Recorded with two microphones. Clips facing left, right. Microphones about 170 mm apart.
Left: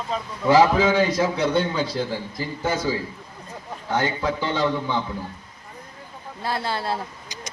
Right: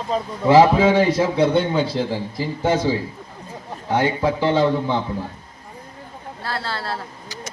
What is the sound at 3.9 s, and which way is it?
Speech, 30° right (ahead or behind).